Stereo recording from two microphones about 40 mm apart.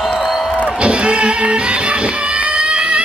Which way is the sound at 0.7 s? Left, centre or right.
Right.